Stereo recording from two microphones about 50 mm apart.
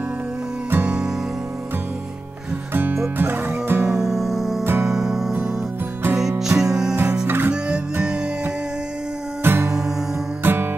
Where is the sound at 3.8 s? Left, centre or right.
Centre.